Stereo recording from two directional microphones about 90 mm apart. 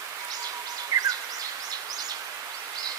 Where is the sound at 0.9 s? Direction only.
40° right (ahead or behind).